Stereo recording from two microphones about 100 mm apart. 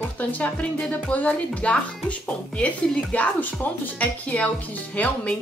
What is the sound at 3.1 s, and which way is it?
Speech, 15° left (ahead or behind).